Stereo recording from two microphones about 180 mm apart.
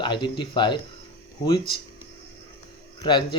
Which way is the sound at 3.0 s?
25° left (ahead or behind).